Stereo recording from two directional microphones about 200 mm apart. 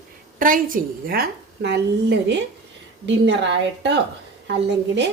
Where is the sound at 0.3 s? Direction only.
45° right (ahead or behind).